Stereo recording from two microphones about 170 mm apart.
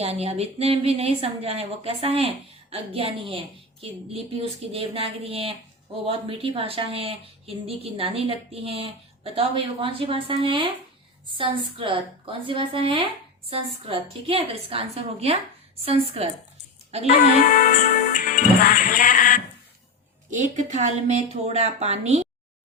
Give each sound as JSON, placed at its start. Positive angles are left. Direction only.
{"t": 0.0, "sound": "a woman's voice", "side_deg": -35}
{"t": 17.4, "sound": "speech", "side_deg": 50}
{"t": 20.3, "sound": "a woman's voice", "side_deg": -45}